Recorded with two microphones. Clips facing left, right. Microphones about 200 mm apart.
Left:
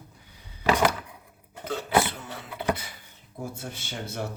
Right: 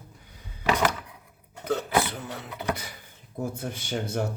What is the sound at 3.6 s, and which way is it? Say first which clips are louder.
Speech: right 5 dB; 50° right (ahead or behind).